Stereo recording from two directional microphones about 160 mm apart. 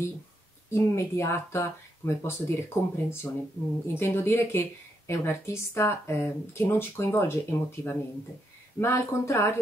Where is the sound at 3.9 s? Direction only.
15° left (ahead or behind).